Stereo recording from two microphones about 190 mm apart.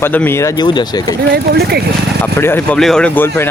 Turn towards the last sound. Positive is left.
turn(degrees=10)  # may be behind; listen again after turning